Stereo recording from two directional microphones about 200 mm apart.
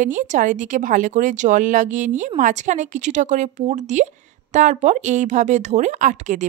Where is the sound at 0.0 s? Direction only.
40° right (ahead or behind).